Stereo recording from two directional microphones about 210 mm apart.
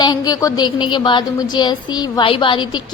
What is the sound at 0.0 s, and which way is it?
A woman's voice, 20° left (ahead or behind).